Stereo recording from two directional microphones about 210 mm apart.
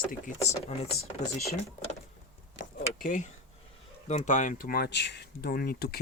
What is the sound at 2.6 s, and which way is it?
Vehicle, 40° left (ahead or behind).